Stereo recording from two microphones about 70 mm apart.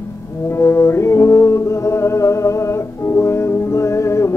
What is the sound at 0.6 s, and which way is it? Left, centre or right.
Music, left.